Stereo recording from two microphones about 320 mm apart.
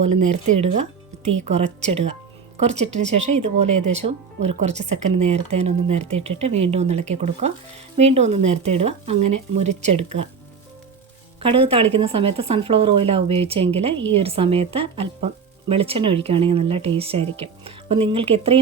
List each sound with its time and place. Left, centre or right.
0.3 s speech: right
11.3 s speech: centre